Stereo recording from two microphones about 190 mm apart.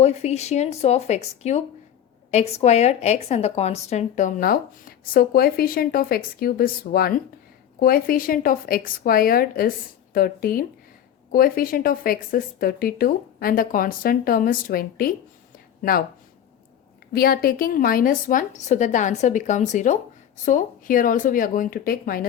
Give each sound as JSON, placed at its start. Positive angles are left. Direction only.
{"t": 0.0, "sound": "speech", "side_deg": 35}
{"t": 15.5, "sound": "a sound", "side_deg": 50}
{"t": 17.1, "sound": "speech", "side_deg": 55}